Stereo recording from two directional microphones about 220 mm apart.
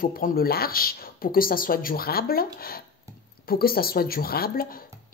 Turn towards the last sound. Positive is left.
turn(degrees=40)  # may be behind; listen again after turning